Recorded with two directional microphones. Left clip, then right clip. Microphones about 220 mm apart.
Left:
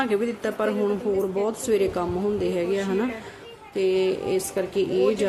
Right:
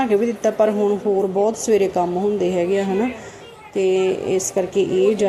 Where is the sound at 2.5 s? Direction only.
5° right (ahead or behind).